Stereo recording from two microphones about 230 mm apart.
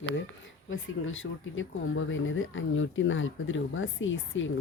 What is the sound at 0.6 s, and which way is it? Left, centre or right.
Speech, left.